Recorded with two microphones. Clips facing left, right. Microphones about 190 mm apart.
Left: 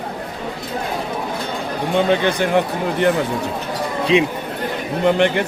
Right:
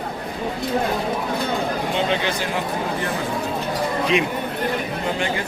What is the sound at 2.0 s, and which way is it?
Speech, 55° left (ahead or behind).